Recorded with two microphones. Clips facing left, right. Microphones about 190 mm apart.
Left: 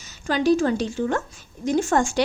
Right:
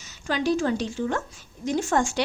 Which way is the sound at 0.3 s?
40° left (ahead or behind).